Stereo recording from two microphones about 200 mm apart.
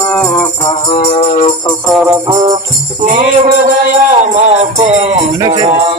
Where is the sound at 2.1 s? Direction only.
25° right (ahead or behind).